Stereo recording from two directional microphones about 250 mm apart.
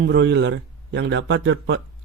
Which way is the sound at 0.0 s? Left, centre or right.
Right.